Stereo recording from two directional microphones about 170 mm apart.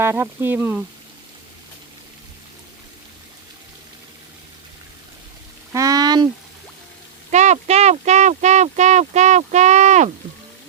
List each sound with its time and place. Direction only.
0.0 s speech: 15° right (ahead or behind)
5.7 s a sound: 20° right (ahead or behind)
7.3 s speech: 45° right (ahead or behind)